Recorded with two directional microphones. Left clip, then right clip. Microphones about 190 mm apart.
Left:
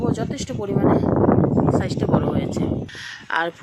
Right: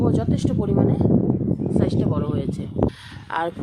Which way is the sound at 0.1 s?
Centre (ahead or behind).